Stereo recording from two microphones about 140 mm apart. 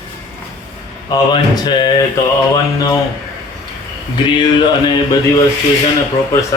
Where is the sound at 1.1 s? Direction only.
30° left (ahead or behind).